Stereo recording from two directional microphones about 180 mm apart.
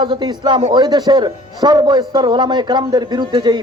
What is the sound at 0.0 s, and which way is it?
A man's voice, 25° right (ahead or behind).